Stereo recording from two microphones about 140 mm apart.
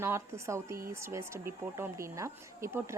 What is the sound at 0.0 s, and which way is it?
A woman's voice, 20° right (ahead or behind).